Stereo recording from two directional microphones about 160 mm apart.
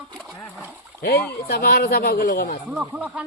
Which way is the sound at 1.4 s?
75° left (ahead or behind).